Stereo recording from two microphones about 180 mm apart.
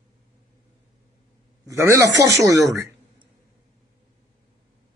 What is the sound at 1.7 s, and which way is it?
Speech, 15° right (ahead or behind).